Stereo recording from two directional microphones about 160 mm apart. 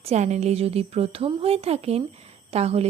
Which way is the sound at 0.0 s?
45° right (ahead or behind).